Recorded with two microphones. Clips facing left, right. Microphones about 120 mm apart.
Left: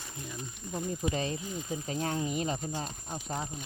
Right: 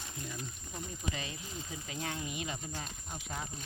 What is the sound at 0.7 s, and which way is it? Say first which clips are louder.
Speech: left 9 dB; 35° left (ahead or behind).